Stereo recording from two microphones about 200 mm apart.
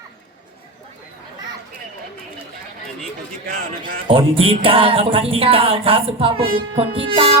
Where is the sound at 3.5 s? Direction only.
45° right (ahead or behind).